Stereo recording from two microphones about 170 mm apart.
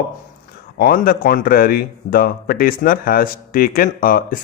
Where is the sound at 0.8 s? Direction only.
60° left (ahead or behind).